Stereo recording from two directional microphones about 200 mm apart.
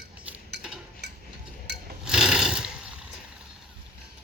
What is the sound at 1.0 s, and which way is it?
Stir, 55° right (ahead or behind).